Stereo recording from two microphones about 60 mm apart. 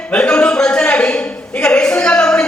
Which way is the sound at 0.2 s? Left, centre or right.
Left.